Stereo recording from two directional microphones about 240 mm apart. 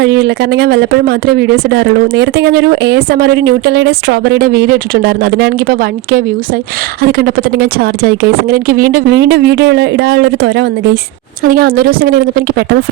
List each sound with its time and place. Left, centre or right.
0.0 s a woman's voice: right